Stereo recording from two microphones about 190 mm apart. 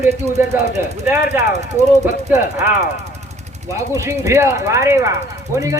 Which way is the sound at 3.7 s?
15° right (ahead or behind).